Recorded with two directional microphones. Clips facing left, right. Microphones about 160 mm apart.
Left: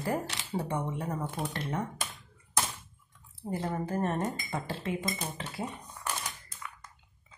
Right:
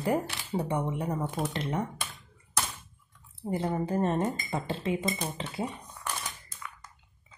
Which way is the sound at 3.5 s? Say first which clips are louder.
Right 3 dB; 20° right (ahead or behind).